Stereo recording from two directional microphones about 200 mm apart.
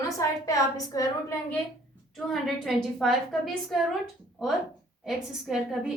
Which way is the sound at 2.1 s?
Centre (ahead or behind).